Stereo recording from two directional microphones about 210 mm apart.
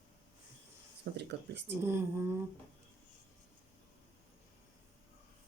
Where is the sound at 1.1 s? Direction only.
55° right (ahead or behind).